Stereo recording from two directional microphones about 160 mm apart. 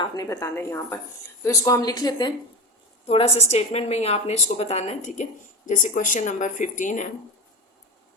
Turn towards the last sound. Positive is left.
turn(degrees=50)  # may be behind; listen again after turning